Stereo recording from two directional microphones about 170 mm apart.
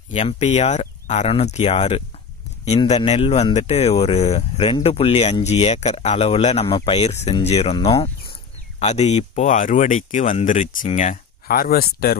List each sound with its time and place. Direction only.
0.1 s speech: 40° left (ahead or behind); by 12.2 s 65° left (ahead or behind)